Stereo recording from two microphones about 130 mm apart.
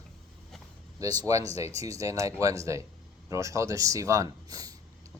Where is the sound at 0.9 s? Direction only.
30° right (ahead or behind).